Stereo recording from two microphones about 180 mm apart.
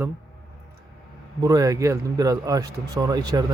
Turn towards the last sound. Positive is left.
turn(degrees=-20)  # may be behind; listen again after turning